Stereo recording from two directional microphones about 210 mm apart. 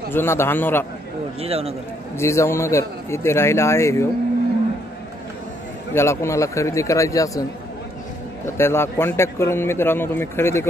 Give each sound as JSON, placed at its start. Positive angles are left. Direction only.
{"t": 0.1, "sound": "a man's voice", "side_deg": 10}
{"t": 1.4, "sound": "a man's voice", "side_deg": -30}
{"t": 2.1, "sound": "a man's voice", "side_deg": 15}
{"t": 5.9, "sound": "a man's voice", "side_deg": 15}
{"t": 8.5, "sound": "a man's voice", "side_deg": 10}